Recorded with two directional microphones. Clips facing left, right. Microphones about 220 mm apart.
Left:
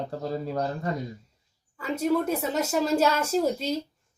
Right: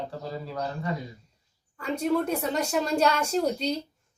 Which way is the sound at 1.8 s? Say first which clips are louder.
Left 1 dB; centre (ahead or behind).